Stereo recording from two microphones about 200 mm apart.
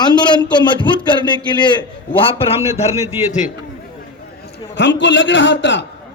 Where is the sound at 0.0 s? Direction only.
20° left (ahead or behind).